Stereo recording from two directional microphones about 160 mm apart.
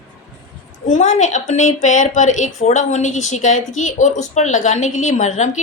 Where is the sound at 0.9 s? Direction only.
50° left (ahead or behind).